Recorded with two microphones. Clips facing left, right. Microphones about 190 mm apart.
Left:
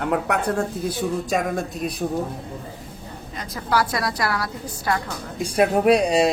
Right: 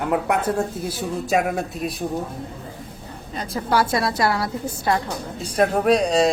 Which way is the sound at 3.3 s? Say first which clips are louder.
Right 2 dB; 30° right (ahead or behind).